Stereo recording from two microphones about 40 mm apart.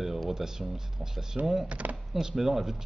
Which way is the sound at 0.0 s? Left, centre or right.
Centre.